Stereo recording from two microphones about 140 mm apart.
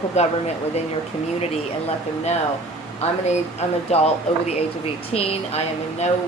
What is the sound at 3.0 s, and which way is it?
Speech, 50° left (ahead or behind).